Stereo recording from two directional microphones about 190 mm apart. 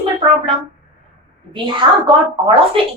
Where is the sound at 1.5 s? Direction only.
25° right (ahead or behind).